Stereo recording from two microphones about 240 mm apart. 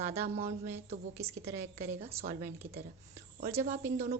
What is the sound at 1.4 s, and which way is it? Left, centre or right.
Speech, right.